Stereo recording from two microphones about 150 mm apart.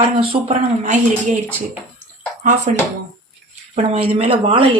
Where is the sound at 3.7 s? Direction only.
45° right (ahead or behind).